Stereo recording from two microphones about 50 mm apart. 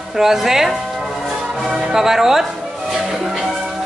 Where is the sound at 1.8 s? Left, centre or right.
Centre.